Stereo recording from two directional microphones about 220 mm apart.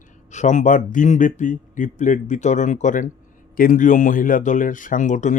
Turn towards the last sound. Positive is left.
turn(degrees=35)  # may be behind; listen again after turning